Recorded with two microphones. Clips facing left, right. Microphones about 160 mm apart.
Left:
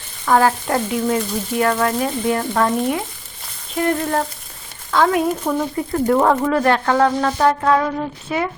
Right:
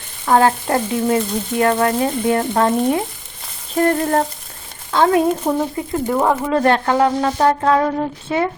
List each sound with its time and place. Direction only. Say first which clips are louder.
0.3 s speech: right 1 dB; 25° right (ahead or behind)
3.8 s music: right 3 dB; 40° right (ahead or behind)
4.9 s speech: right 2 dB; 30° right (ahead or behind)
6.1 s speech: left 2 dB; 10° right (ahead or behind)
6.5 s speech: right 1 dB; 30° right (ahead or behind)
6.9 s speech: right 1 dB; 15° right (ahead or behind)
7.3 s music: right 2 dB; 30° right (ahead or behind)